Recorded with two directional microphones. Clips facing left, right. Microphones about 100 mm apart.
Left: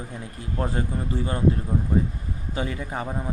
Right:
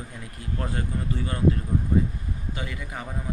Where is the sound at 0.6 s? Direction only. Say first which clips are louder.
Left 4 dB; 25° left (ahead or behind).